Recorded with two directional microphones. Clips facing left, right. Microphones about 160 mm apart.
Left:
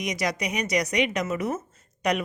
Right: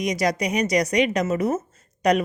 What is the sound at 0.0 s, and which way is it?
A woman's voice, 35° right (ahead or behind).